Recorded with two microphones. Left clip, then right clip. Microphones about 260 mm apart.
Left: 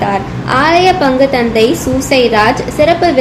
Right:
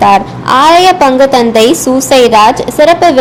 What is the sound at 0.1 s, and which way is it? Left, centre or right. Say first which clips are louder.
A woman's voice: right 7 dB; right.